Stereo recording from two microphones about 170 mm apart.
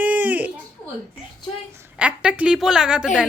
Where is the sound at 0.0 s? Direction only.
10° right (ahead or behind).